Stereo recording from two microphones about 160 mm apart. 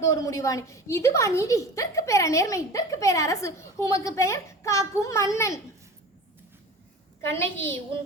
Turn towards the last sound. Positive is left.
turn(degrees=15)  # may be behind; listen again after turning